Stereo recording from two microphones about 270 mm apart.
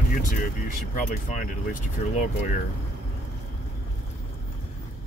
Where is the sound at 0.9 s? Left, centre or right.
Left.